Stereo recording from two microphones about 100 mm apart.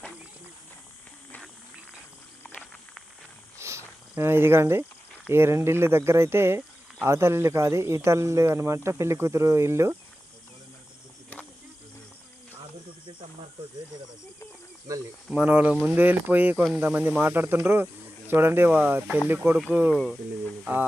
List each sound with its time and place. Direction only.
2.5 s snake: 5° left (ahead or behind)
3.6 s cricket: 30° right (ahead or behind)
4.1 s speech: 20° right (ahead or behind)
15.3 s speech: 15° right (ahead or behind)